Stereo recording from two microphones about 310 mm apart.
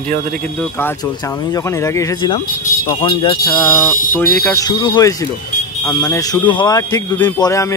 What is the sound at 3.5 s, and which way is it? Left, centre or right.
Speech, centre.